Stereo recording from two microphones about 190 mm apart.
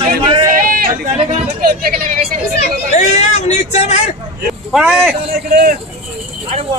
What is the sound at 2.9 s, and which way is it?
Speech, 35° left (ahead or behind).